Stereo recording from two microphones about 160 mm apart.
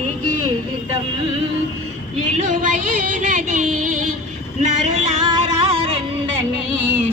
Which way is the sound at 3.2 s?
55° right (ahead or behind).